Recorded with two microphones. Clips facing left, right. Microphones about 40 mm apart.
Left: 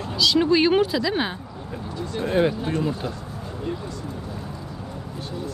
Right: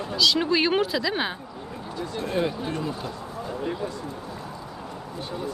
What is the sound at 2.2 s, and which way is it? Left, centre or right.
Speech, left.